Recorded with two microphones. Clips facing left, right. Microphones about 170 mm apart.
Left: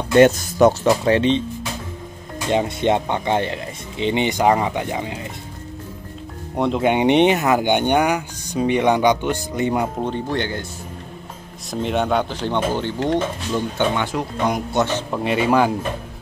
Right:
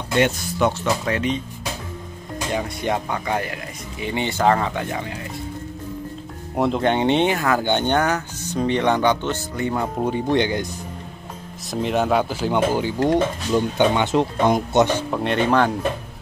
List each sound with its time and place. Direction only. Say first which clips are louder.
0.2 s speech: left 7 dB; 40° left (ahead or behind)
2.5 s speech: left 6 dB; 25° left (ahead or behind)
6.5 s speech: even; centre (ahead or behind)
6.8 s speech: left 5 dB; 10° left (ahead or behind)
10.0 s speech: right 3 dB; 15° right (ahead or behind)
11.7 s speech: even; centre (ahead or behind); by 14.9 s 25° right (ahead or behind)
15.0 s speech: even; centre (ahead or behind)